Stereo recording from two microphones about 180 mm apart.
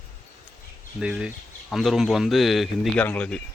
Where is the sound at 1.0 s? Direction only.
5° right (ahead or behind).